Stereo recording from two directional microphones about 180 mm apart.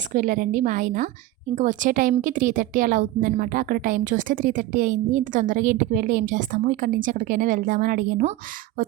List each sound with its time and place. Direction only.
0.1 s a woman's voice: 45° right (ahead or behind)